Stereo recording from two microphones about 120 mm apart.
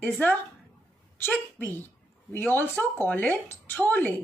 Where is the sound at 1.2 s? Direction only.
15° left (ahead or behind).